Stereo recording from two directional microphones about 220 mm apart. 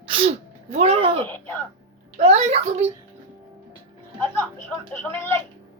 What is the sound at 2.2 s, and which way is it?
Speech, 30° right (ahead or behind).